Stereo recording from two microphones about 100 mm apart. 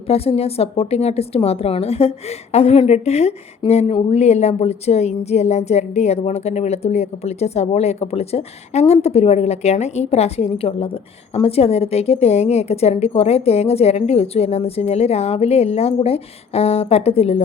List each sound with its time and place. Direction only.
0.1 s a woman's voice: 90° left; by 10.9 s 70° left (ahead or behind)
11.4 s a woman's voice: 90° left